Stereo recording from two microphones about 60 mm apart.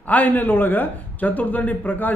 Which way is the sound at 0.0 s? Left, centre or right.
Left.